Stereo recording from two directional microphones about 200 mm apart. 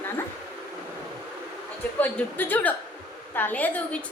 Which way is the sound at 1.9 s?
10° left (ahead or behind).